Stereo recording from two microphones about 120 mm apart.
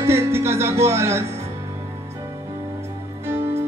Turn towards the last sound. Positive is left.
turn(degrees=-20)  # may be behind; listen again after turning